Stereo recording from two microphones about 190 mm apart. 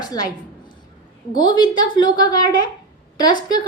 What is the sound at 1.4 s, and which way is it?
A woman's voice, 25° left (ahead or behind).